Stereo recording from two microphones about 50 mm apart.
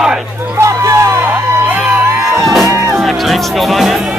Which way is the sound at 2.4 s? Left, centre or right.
Centre.